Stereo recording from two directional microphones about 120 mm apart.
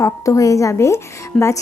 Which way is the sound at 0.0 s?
30° left (ahead or behind).